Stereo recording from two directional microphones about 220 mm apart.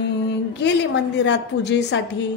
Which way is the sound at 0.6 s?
50° left (ahead or behind).